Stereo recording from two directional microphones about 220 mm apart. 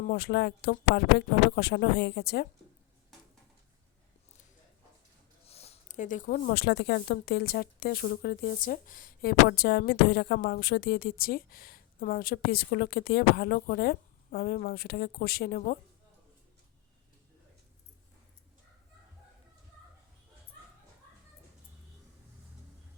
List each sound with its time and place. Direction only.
0.1 s speech: 45° left (ahead or behind)
5.5 s speech: 30° left (ahead or behind)